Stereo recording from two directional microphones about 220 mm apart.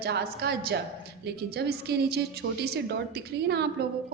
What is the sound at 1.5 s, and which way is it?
A woman's voice, 45° right (ahead or behind).